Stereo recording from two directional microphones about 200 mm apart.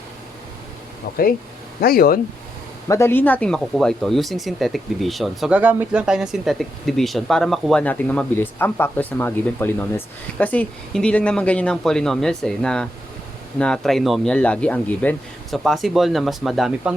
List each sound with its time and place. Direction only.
1.1 s speech: 55° left (ahead or behind)
2.9 s speech: 10° left (ahead or behind)